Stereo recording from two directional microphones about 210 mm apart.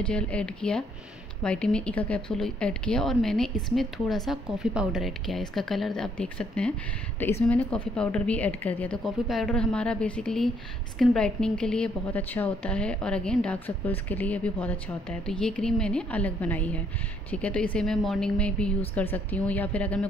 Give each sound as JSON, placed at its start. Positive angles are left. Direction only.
{"t": 0.0, "sound": "a woman's voice", "side_deg": 5}